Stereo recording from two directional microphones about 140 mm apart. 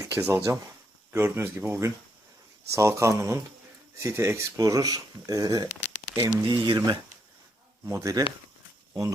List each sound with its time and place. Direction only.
0.0 s speech: 20° right (ahead or behind)